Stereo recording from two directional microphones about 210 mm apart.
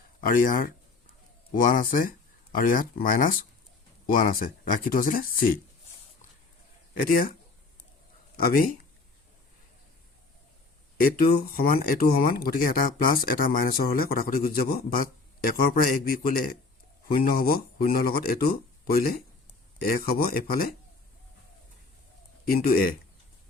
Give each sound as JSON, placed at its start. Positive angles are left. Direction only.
{"t": 0.2, "sound": "speech", "side_deg": 40}
{"t": 6.9, "sound": "speech", "side_deg": 40}
{"t": 8.4, "sound": "speech", "side_deg": 45}
{"t": 11.3, "sound": "speech", "side_deg": 45}
{"t": 22.4, "sound": "speech", "side_deg": 45}